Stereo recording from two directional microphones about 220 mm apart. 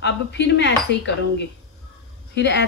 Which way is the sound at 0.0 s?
50° left (ahead or behind).